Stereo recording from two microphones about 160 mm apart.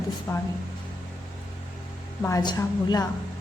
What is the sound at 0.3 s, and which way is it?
Speech, 15° left (ahead or behind).